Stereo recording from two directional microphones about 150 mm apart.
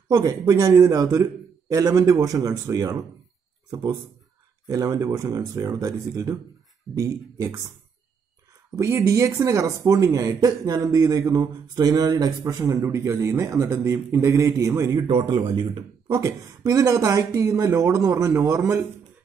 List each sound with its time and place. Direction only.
0.1 s speech: 25° right (ahead or behind)
4.6 s speech: 25° right (ahead or behind)
8.7 s speech: 20° right (ahead or behind)
15.0 s speech: 35° right (ahead or behind)
16.2 s speech: 20° right (ahead or behind)